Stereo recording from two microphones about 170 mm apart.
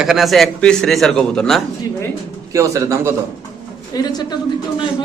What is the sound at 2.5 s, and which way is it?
Speech, 20° right (ahead or behind).